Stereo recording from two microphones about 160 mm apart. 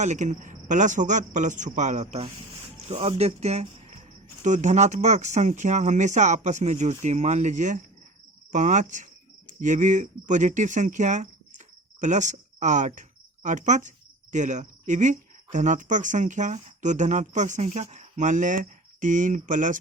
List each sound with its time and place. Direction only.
0.0 s speech: 50° right (ahead or behind)